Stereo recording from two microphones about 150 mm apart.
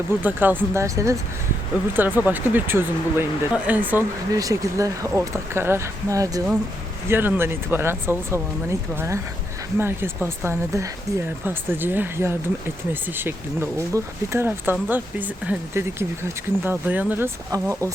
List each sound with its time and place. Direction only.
0.2 s speech: 10° right (ahead or behind)
4.3 s speech: 25° right (ahead or behind)
17.5 s speech: 20° right (ahead or behind)